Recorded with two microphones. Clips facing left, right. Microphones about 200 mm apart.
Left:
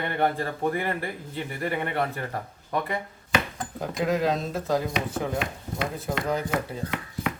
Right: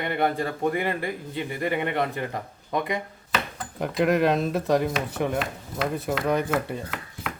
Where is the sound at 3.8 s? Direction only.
65° right (ahead or behind).